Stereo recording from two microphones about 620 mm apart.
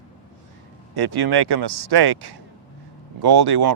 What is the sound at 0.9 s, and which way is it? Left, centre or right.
Speech, right.